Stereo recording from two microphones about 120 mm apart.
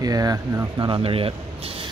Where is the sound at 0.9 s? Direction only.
50° right (ahead or behind).